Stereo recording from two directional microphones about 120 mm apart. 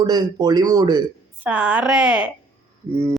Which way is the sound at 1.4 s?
10° right (ahead or behind).